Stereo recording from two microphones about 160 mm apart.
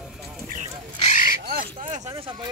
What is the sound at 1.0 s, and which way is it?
Crow, 50° left (ahead or behind).